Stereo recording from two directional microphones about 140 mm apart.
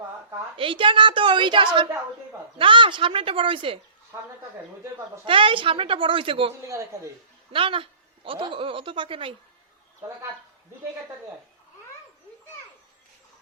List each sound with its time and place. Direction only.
0.5 s a woman's voice: 40° right (ahead or behind)
5.2 s a woman's voice: 40° right (ahead or behind)
6.7 s a man's voice: 20° right (ahead or behind)
7.5 s a woman's voice: 40° right (ahead or behind)